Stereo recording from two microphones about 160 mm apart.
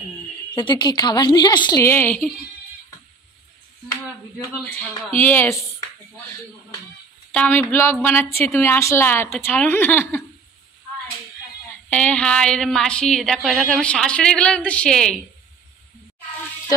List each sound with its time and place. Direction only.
0.6 s a woman's voice: 30° left (ahead or behind); by 2.3 s 10° left (ahead or behind)
4.4 s a woman's voice: 10° left (ahead or behind)
7.3 s a woman's voice: 10° left (ahead or behind)
11.9 s a woman's voice: 5° left (ahead or behind)